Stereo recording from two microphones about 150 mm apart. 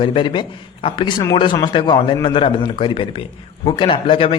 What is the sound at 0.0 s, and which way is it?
Speech, 35° left (ahead or behind).